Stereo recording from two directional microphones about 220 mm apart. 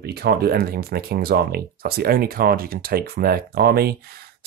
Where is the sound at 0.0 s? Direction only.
45° right (ahead or behind).